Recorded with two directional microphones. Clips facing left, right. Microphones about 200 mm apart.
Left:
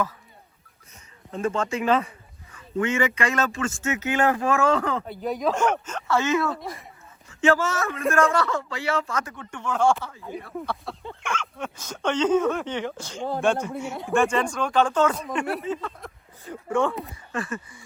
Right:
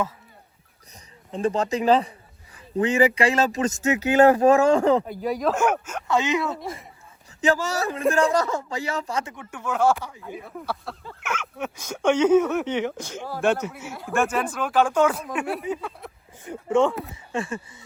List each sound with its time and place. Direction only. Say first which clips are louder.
1.3 s a man's voice: right 2 dB; 35° right (ahead or behind)
5.2 s speech: right 1 dB; centre (ahead or behind); by 6.6 s 15° right (ahead or behind)
6.6 s speech: right 2 dB; centre (ahead or behind)
7.3 s a man's voice: left 1 dB; 35° right (ahead or behind)
9.3 s speech: even; 10° right (ahead or behind)
13.1 s speech: left 4 dB; 20° left (ahead or behind)
13.4 s speech: right 2 dB; 5° right (ahead or behind)
16.4 s speech: right 4 dB; 20° right (ahead or behind)